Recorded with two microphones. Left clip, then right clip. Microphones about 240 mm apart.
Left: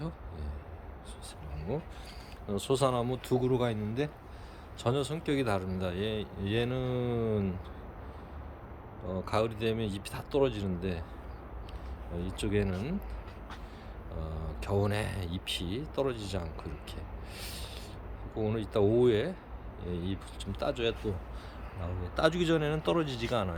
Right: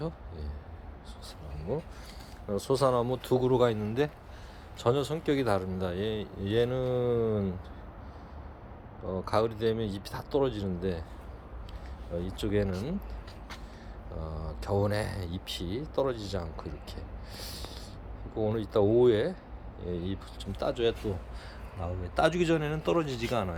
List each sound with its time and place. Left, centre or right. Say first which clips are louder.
1.7 s speech: right 3 dB; centre
2.6 s speech: right 2 dB; left
2.8 s speech: right 3 dB; centre
9.3 s speech: right 3 dB; centre
12.1 s speech: right 2 dB; centre
14.2 s speech: right 2 dB; centre
14.6 s speech: right 2 dB; centre
18.3 s speech: right 3 dB; centre
22.1 s speech: right 2 dB; centre